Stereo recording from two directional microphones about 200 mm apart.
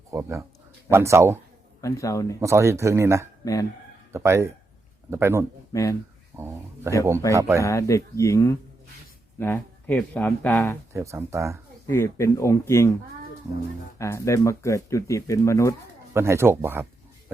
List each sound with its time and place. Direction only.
0.1 s speech: 15° right (ahead or behind)
1.8 s speech: 15° left (ahead or behind)
2.4 s speech: 15° right (ahead or behind)
3.4 s speech: 15° left (ahead or behind)
4.1 s speech: 15° right (ahead or behind)
5.7 s speech: 15° left (ahead or behind)
6.3 s speech: 15° right (ahead or behind)
7.2 s speech: 15° left (ahead or behind)
10.9 s speech: 15° right (ahead or behind)
11.9 s speech: 15° left (ahead or behind)
14.0 s speech: 15° left (ahead or behind)
16.1 s speech: 10° right (ahead or behind)